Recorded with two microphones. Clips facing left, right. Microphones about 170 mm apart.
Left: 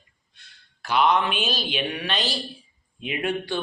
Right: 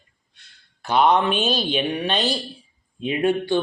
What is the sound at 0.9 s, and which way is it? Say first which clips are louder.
Speech: right 3 dB; 40° right (ahead or behind).